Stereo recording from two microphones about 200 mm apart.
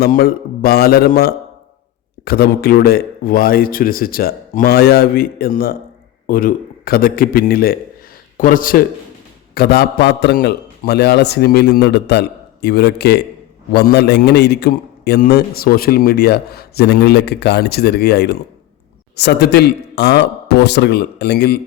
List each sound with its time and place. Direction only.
0.0 s a man's voice: 50° left (ahead or behind)